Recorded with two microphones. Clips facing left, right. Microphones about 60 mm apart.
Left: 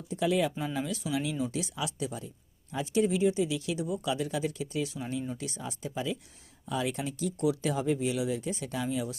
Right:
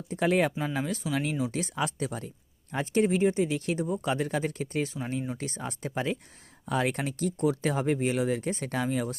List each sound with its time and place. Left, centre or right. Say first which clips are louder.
0.1 s speech: right 3 dB; right